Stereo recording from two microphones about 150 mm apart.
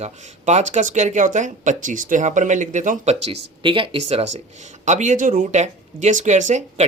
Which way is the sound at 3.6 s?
35° right (ahead or behind).